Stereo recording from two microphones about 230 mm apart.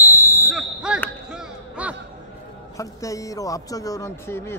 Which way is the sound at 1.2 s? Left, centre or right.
Centre.